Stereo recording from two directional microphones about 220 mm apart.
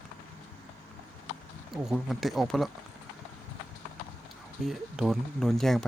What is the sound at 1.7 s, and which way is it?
Speech, centre (ahead or behind).